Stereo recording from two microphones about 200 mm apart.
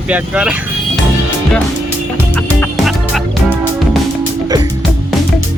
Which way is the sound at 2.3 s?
5° left (ahead or behind).